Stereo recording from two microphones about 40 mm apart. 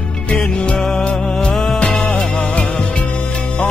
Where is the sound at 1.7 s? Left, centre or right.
Left.